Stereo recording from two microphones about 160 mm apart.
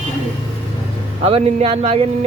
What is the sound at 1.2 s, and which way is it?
Speech, 40° right (ahead or behind).